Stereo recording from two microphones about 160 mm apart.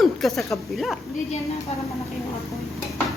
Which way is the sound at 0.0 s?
Centre (ahead or behind).